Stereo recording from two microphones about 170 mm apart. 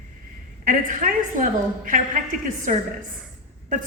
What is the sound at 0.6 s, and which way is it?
A woman's voice, 45° right (ahead or behind).